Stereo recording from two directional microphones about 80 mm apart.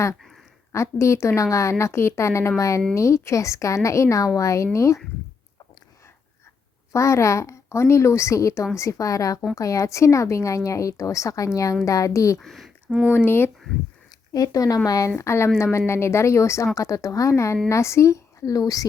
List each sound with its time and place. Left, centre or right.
0.7 s speech: left
6.9 s a woman's voice: left
12.4 s speech: centre
12.9 s speech: centre
13.1 s speech: left
14.3 s a woman's voice: left
15.2 s speech: left